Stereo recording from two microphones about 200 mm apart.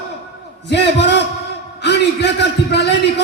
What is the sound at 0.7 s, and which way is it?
Speech, 60° left (ahead or behind).